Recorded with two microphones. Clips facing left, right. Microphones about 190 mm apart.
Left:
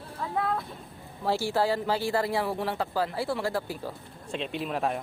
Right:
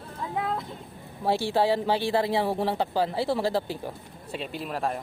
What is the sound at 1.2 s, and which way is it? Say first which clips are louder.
Speech: right 2 dB; 20° right (ahead or behind).